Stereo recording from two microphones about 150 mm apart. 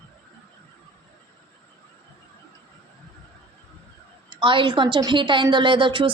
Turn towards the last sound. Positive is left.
turn(degrees=-35)  # may be behind; listen again after turning